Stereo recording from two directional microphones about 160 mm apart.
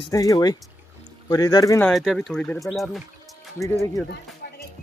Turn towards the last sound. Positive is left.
turn(degrees=90)